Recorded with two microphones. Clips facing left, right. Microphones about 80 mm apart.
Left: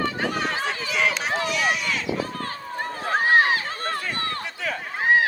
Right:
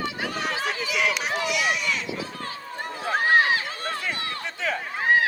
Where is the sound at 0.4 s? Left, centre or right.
Left.